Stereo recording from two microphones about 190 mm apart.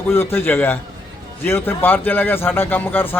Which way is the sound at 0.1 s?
10° left (ahead or behind).